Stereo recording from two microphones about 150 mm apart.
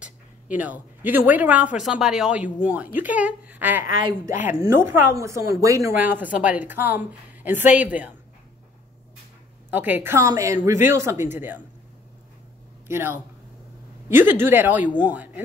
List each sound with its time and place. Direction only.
0.0 s a woman's voice: 10° right (ahead or behind)
9.7 s a woman's voice: 10° right (ahead or behind)
12.8 s speech: 15° right (ahead or behind)